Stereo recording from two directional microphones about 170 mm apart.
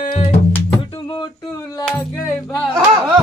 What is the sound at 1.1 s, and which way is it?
Music, 20° left (ahead or behind).